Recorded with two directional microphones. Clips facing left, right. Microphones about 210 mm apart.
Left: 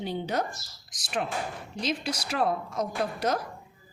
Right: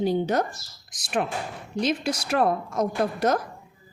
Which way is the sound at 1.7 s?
55° right (ahead or behind).